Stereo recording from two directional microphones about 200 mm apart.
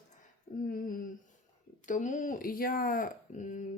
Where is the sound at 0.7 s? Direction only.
45° left (ahead or behind).